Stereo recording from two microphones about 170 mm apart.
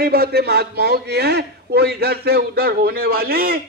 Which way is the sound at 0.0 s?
65° right (ahead or behind).